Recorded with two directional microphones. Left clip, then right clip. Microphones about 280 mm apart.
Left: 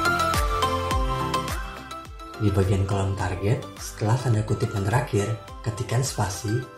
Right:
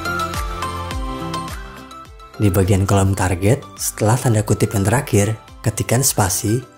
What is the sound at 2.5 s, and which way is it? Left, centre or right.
Speech, right.